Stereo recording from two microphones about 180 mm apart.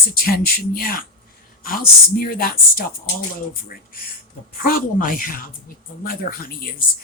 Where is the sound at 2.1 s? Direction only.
55° left (ahead or behind).